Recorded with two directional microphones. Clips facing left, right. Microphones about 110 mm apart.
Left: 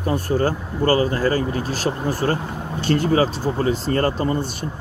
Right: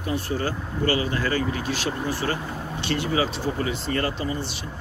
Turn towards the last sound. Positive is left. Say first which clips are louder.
# left 7 dB
turn(degrees=50)  # may be behind; listen again after turning